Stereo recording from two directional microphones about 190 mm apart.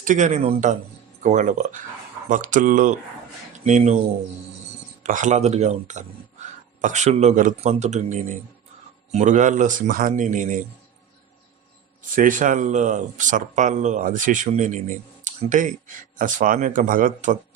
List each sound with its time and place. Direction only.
0.0 s speech: 40° right (ahead or behind)
5.0 s speech: 40° right (ahead or behind)
12.1 s speech: 45° right (ahead or behind)